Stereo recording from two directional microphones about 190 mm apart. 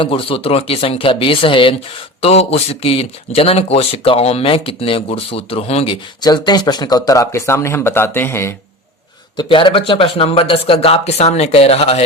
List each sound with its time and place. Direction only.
0.0 s speech: 30° left (ahead or behind); by 8.5 s 15° left (ahead or behind)
9.3 s speech: 25° left (ahead or behind)